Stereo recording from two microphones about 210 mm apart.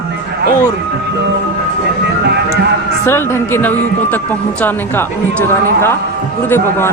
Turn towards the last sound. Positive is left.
turn(degrees=10)  # may be behind; listen again after turning